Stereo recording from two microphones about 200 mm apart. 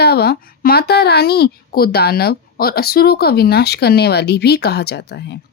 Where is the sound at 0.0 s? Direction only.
50° left (ahead or behind).